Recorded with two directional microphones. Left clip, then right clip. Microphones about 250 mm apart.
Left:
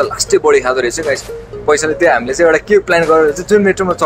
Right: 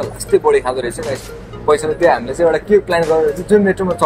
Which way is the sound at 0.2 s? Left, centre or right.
Left.